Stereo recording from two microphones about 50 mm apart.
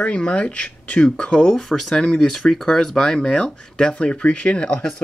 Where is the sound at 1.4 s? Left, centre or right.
Centre.